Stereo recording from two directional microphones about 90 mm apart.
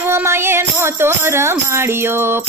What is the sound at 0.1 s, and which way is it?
Speech, 25° right (ahead or behind).